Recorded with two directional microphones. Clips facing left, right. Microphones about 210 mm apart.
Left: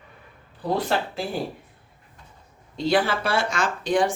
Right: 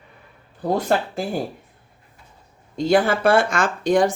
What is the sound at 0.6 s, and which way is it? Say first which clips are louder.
Speech: right 4 dB; 45° right (ahead or behind).